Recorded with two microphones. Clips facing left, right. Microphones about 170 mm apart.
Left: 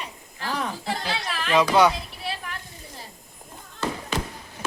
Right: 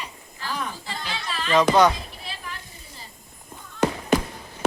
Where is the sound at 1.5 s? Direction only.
10° left (ahead or behind).